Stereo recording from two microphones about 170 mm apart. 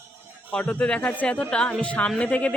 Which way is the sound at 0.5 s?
10° left (ahead or behind).